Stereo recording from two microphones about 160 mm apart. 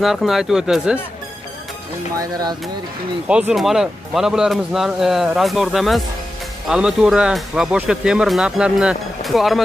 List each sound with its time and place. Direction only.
0.0 s speech: centre (ahead or behind)
2.1 s speech: 25° right (ahead or behind)
3.3 s speech: 5° right (ahead or behind)